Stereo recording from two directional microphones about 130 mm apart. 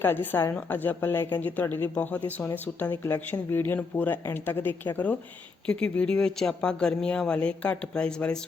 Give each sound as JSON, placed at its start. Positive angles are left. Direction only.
{"t": 0.0, "sound": "a woman's voice", "side_deg": 15}